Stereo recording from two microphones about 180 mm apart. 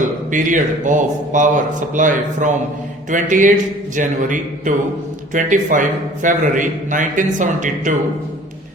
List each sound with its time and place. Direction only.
0.0 s speech: 45° right (ahead or behind)